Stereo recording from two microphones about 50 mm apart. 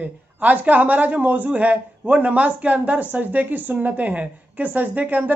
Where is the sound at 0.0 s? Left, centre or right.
Right.